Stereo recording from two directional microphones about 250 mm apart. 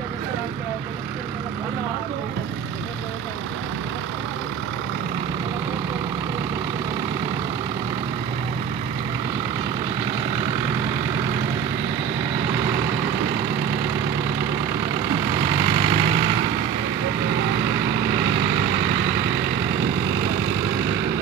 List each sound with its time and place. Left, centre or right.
15.6 s vehicle: centre